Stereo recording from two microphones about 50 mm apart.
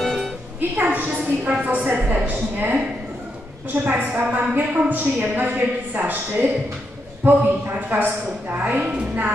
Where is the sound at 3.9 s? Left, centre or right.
Right.